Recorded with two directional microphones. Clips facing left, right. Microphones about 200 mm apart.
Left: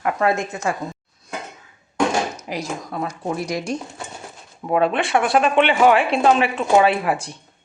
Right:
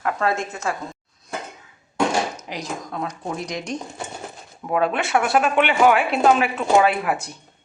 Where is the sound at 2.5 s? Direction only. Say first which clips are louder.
Left 3 dB; 5° left (ahead or behind).